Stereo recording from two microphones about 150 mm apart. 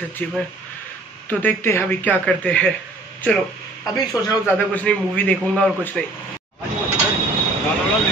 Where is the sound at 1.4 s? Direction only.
15° left (ahead or behind).